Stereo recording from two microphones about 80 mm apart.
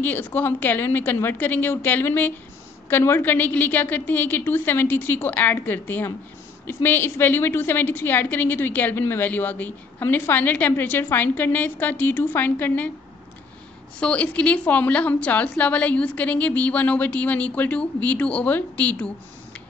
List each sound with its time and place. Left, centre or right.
0.0 s a woman's voice: left
13.9 s a woman's voice: centre